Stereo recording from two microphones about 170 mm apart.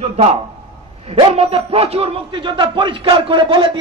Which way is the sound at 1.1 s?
35° right (ahead or behind).